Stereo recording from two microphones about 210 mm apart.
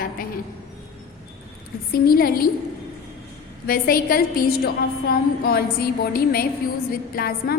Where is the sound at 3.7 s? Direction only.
45° left (ahead or behind).